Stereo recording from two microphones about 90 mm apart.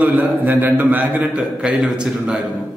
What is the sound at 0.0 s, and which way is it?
A man's voice, 20° right (ahead or behind).